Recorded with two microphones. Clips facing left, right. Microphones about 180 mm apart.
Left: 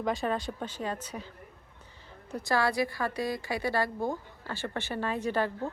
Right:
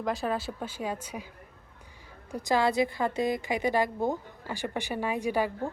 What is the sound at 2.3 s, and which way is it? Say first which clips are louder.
Speech: right 2 dB; 20° right (ahead or behind).